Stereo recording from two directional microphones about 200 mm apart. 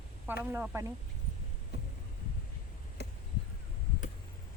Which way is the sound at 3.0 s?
55° left (ahead or behind).